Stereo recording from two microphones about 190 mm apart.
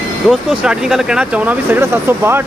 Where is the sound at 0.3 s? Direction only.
Centre (ahead or behind).